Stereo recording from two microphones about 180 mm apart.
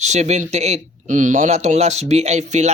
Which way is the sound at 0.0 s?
40° right (ahead or behind).